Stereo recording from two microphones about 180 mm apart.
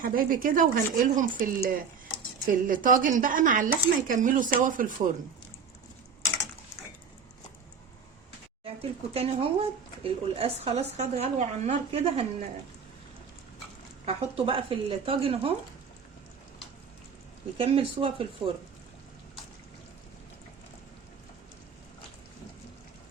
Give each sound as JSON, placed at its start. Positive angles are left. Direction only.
{"t": 0.0, "sound": "speech", "side_deg": -50}
{"t": 8.8, "sound": "a woman's voice", "side_deg": -35}
{"t": 14.0, "sound": "a woman's voice", "side_deg": -35}
{"t": 17.6, "sound": "speech", "side_deg": -30}